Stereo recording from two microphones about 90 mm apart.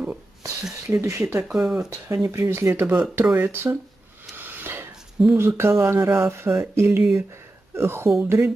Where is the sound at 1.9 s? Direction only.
35° right (ahead or behind).